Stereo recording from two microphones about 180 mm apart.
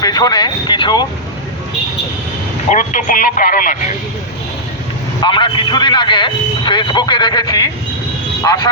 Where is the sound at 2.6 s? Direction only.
45° left (ahead or behind).